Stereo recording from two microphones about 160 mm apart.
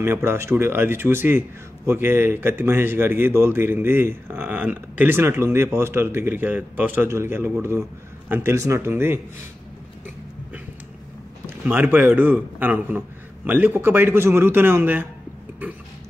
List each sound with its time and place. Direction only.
0.0 s speech: 15° right (ahead or behind)
11.6 s speech: 10° right (ahead or behind)